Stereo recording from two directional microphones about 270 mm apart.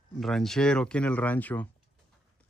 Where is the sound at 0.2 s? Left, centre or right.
Centre.